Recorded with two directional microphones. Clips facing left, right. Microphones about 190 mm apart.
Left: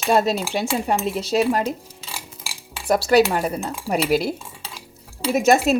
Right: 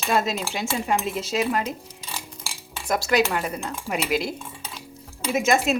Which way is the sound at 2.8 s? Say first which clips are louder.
Left 6 dB; 35° left (ahead or behind).